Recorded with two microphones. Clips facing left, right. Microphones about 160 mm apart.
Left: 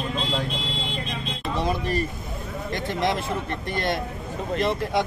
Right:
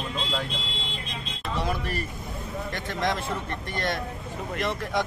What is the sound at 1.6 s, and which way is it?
Speech, 20° left (ahead or behind).